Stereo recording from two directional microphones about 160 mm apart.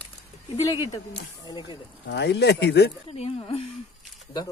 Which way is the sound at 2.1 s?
90° left.